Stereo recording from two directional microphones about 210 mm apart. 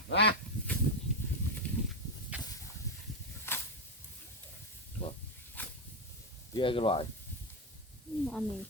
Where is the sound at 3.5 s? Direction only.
10° left (ahead or behind).